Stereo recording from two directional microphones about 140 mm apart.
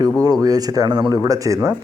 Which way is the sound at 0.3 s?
25° right (ahead or behind).